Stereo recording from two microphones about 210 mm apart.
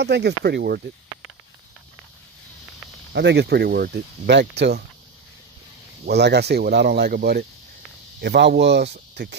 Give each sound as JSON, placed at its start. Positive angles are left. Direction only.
{"t": 0.0, "sound": "speech", "side_deg": -50}
{"t": 3.1, "sound": "speech", "side_deg": -55}
{"t": 6.0, "sound": "speech", "side_deg": -50}